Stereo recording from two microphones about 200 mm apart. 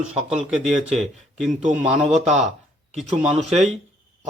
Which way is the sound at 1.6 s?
35° right (ahead or behind).